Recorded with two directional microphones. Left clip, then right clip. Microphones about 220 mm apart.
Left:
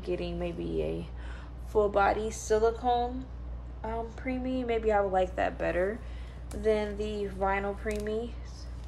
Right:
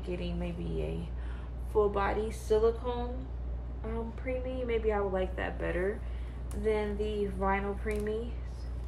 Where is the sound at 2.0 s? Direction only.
50° left (ahead or behind).